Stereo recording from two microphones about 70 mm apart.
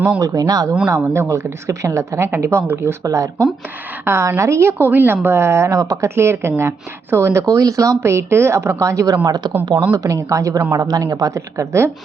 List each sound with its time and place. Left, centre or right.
0.2 s speech: right
0.9 s a woman's voice: right
3.0 s speech: right
4.0 s a woman's voice: right
4.8 s a woman's voice: right
6.1 s a woman's voice: right
9.2 s speech: right
9.9 s a woman's voice: right